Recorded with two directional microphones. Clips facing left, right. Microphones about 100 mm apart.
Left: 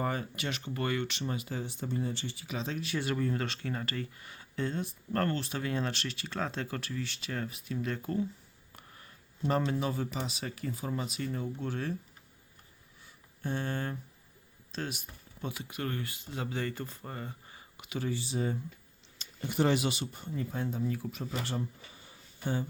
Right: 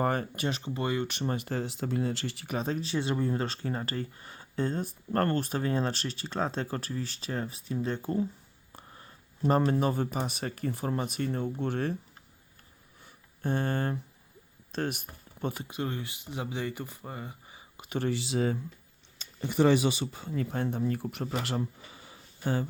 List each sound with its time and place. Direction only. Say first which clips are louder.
0.0 s speech: right 5 dB; 50° right (ahead or behind)
0.4 s speech: right 1 dB; 30° right (ahead or behind)
1.0 s speech: right 4 dB; 45° right (ahead or behind)
2.8 s speech: right 3 dB; 25° right (ahead or behind)
8.7 s a sound: right 4 dB; 30° right (ahead or behind)
9.5 s speech: right 5 dB; 45° right (ahead or behind)
13.0 s a sound: right 4 dB; 50° right (ahead or behind)
14.7 s speech: right 6 dB; 55° right (ahead or behind)
15.8 s speech: right 2 dB; 15° right (ahead or behind)
17.7 s speech: right 5 dB; 45° right (ahead or behind)
18.1 s speech: right 4 dB; 90° right
20.3 s speech: right 4 dB; 70° right (ahead or behind); by 22.6 s 90° right